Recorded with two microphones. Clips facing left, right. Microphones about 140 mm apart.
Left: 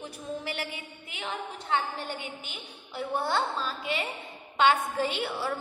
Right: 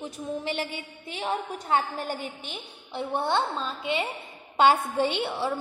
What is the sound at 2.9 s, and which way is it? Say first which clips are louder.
A woman's voice: right 2 dB; 20° right (ahead or behind).